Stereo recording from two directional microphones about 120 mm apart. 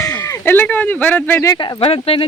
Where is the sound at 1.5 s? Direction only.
35° left (ahead or behind).